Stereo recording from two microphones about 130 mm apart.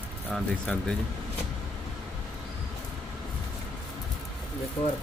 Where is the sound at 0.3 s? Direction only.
5° left (ahead or behind).